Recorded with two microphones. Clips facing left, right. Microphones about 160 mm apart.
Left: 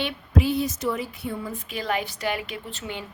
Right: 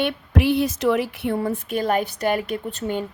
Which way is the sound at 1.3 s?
50° right (ahead or behind).